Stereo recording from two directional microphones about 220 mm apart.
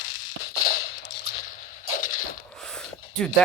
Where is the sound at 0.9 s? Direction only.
50° left (ahead or behind).